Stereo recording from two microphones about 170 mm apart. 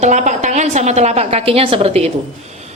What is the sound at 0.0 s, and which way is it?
A woman's voice, 45° right (ahead or behind).